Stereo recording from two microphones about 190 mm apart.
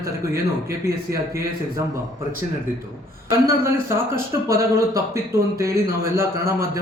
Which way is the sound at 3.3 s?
15° right (ahead or behind).